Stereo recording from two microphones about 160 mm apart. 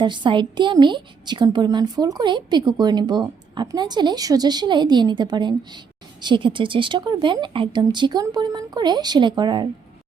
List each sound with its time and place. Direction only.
0.0 s a woman's voice: 30° right (ahead or behind)